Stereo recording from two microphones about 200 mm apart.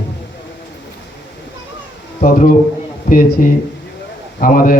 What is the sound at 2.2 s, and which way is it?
A man's voice, 45° left (ahead or behind).